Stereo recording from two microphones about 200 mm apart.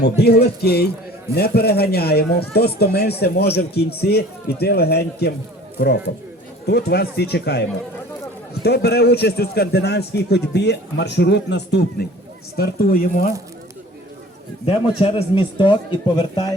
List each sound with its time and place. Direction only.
0.0 s a man's voice: 55° left (ahead or behind)
8.6 s a man's voice: 55° left (ahead or behind)
14.9 s a man's voice: 25° left (ahead or behind)